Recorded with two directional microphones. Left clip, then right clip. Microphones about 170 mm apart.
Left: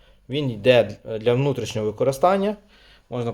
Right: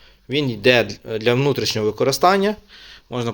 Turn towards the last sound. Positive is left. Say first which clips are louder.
# right 2 dB
turn(degrees=-5)  # may be behind; listen again after turning